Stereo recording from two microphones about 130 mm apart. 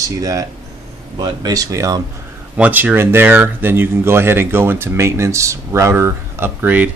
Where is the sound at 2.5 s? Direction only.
10° right (ahead or behind).